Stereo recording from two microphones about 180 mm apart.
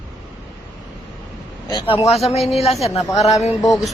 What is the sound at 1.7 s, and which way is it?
Speech, 30° left (ahead or behind).